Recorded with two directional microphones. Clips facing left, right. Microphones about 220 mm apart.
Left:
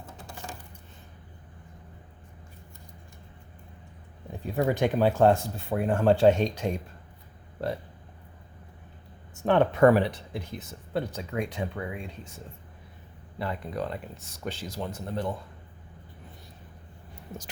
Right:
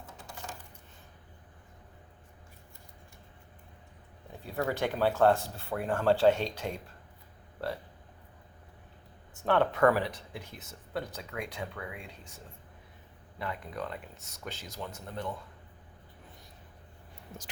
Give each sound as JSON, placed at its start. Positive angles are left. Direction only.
{"t": 4.3, "sound": "speech", "side_deg": 15}
{"t": 9.5, "sound": "speech", "side_deg": 20}
{"t": 13.4, "sound": "speech", "side_deg": 30}